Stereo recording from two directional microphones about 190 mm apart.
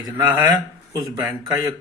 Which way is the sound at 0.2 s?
20° right (ahead or behind).